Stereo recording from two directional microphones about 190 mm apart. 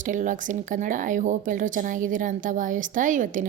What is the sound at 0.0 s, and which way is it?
Speech, 40° right (ahead or behind).